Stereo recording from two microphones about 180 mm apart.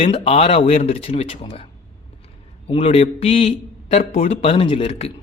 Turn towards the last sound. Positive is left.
turn(degrees=35)  # may be behind; listen again after turning